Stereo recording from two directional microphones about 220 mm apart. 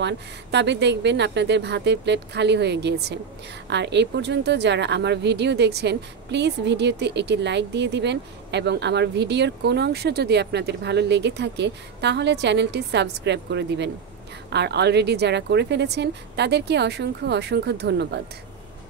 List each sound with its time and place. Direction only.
0.0 s a woman's voice: 50° right (ahead or behind)